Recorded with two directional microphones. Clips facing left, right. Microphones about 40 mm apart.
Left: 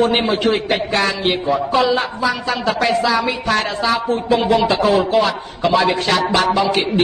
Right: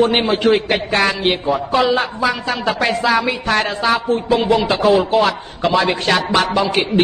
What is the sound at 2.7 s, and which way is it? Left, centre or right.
Speech, right.